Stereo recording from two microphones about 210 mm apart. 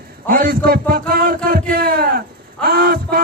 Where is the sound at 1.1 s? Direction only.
45° right (ahead or behind).